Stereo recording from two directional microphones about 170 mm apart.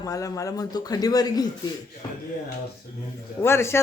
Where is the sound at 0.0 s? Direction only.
20° left (ahead or behind).